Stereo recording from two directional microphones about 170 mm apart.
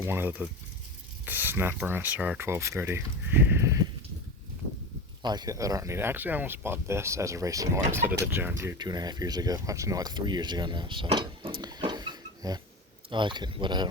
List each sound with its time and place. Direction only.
0.0 s speech: 15° right (ahead or behind)
5.2 s speech: 25° right (ahead or behind)
11.6 s a sound: 25° right (ahead or behind)
13.1 s speech: 30° right (ahead or behind)